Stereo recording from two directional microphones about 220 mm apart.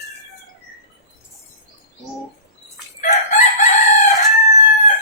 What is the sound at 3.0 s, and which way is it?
Chicken, 35° left (ahead or behind).